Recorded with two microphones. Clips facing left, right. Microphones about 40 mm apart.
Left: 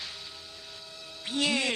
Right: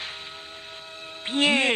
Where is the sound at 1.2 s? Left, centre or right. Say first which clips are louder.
Right 7 dB; right.